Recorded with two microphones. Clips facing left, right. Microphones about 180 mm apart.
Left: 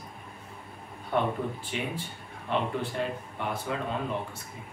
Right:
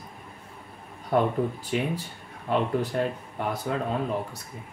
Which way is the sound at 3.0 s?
45° right (ahead or behind).